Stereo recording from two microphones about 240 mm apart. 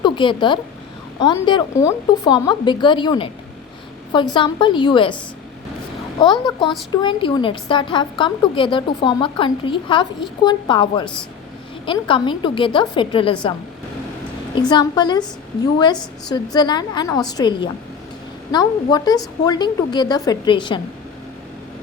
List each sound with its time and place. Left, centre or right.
0.0 s a woman's voice: centre
14.6 s speech: centre